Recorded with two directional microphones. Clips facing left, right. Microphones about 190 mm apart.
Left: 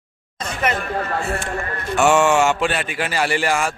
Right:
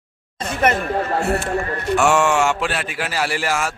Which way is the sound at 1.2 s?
65° right (ahead or behind).